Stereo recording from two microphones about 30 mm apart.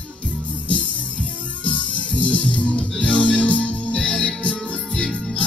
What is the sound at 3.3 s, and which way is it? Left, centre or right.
Music, left.